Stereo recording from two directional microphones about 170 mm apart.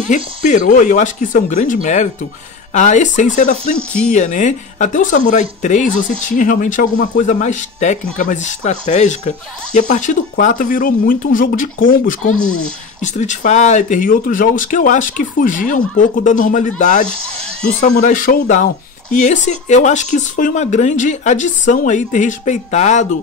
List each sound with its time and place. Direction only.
0.1 s speech: 45° left (ahead or behind)
3.7 s speech: 5° left (ahead or behind)
4.1 s speech: 45° left (ahead or behind)
13.0 s speech: 45° left (ahead or behind)